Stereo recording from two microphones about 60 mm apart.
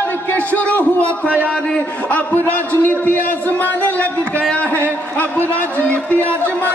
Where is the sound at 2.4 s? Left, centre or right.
Left.